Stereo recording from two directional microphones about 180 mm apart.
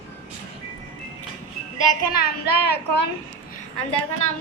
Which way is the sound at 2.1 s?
60° left (ahead or behind).